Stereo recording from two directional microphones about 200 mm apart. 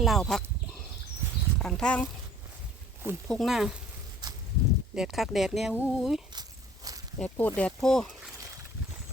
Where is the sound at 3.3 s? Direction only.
Centre (ahead or behind).